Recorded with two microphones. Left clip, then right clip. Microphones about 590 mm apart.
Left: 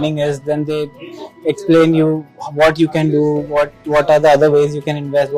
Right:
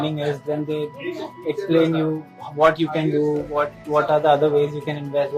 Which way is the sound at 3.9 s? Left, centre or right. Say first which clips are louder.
Left 7 dB; left.